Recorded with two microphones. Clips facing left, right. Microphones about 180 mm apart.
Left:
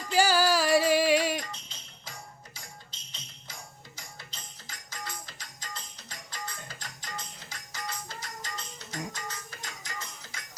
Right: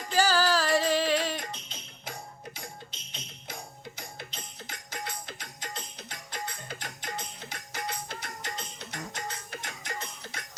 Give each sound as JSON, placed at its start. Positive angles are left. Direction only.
{"t": 0.1, "sound": "music", "side_deg": 10}
{"t": 1.4, "sound": "music", "side_deg": -60}